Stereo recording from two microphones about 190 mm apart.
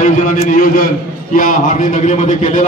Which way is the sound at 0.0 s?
40° left (ahead or behind).